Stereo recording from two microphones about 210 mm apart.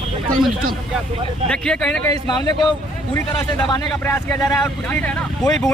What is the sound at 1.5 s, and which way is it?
Speech, 5° left (ahead or behind).